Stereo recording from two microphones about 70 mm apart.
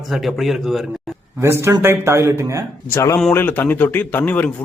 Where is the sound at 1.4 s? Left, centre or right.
Right.